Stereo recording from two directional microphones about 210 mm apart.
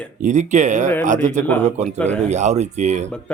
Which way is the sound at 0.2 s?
35° right (ahead or behind).